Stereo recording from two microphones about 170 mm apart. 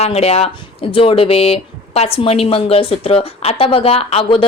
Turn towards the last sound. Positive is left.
turn(degrees=35)  # may be behind; listen again after turning